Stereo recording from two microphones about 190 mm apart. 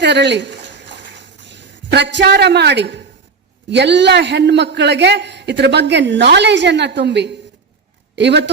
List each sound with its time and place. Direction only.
0.0 s a man's voice: 65° right (ahead or behind)
1.9 s a man's voice: 65° right (ahead or behind)